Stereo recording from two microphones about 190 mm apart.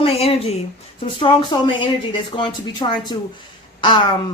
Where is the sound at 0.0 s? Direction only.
30° left (ahead or behind).